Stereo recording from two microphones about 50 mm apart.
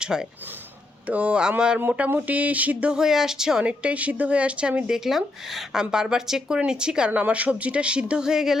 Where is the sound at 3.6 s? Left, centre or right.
Right.